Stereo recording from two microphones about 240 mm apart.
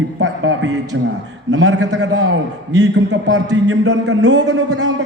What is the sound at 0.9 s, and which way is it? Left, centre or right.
A man's voice, right.